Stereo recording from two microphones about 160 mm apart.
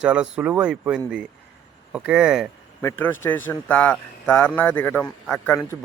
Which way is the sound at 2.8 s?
10° left (ahead or behind).